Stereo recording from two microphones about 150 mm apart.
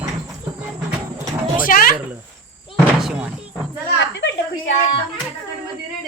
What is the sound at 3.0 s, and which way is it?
Music, 5° right (ahead or behind).